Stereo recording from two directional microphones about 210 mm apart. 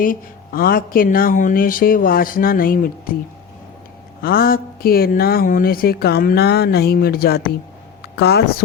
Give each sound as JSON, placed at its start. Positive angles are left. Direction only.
{"t": 0.0, "sound": "speech", "side_deg": 40}
{"t": 4.2, "sound": "speech", "side_deg": 45}